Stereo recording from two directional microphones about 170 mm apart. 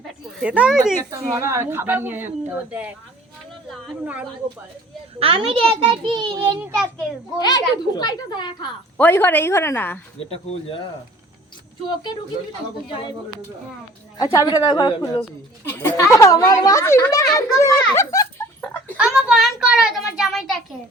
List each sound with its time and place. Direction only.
0.4 s speech: 5° right (ahead or behind)
1.4 s speech: 15° right (ahead or behind)
4.0 s speech: 10° right (ahead or behind)
5.2 s a child's voice: 30° right (ahead or behind)
7.3 s a child's voice: 25° left (ahead or behind)
9.0 s a woman's voice: 10° left (ahead or behind)
10.2 s speech: 35° left (ahead or behind)
14.2 s a child's voice: 20° left (ahead or behind)
15.6 s a woman's voice: 15° left (ahead or behind)
18.6 s a sound: 10° left (ahead or behind)
18.9 s a child's voice: 5° right (ahead or behind)